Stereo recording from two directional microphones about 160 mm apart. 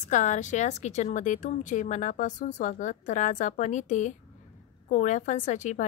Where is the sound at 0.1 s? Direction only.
50° left (ahead or behind).